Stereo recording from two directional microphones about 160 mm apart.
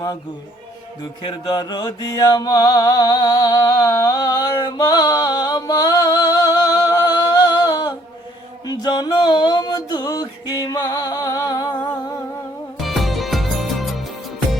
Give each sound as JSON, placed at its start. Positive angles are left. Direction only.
{"t": 1.2, "sound": "mantra", "side_deg": 25}
{"t": 8.6, "sound": "a sound", "side_deg": 25}
{"t": 12.8, "sound": "music", "side_deg": 0}